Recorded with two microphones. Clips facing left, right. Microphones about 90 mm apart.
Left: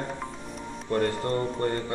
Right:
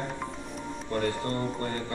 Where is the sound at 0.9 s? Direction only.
40° left (ahead or behind).